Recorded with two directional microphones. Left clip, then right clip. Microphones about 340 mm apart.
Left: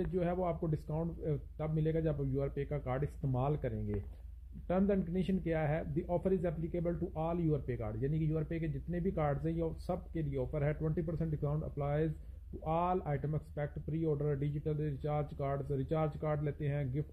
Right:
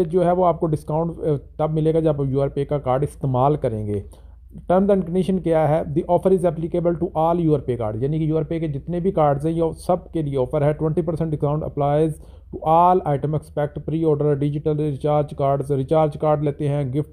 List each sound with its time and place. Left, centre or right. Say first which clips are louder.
0.0 s speech: right 18 dB; centre